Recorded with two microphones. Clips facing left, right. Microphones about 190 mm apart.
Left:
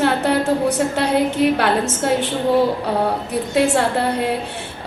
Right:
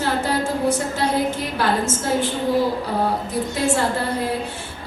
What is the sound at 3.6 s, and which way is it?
Speech, 65° left (ahead or behind).